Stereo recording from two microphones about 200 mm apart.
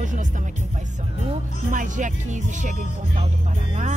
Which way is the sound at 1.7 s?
40° right (ahead or behind).